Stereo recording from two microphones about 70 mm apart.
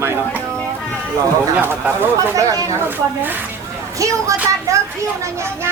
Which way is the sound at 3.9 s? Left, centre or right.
Right.